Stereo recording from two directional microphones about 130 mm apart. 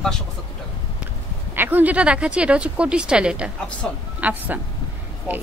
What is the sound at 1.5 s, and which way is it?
Speech, 15° right (ahead or behind).